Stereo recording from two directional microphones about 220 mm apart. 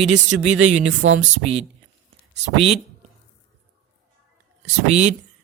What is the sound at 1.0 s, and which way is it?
Speech, 60° right (ahead or behind).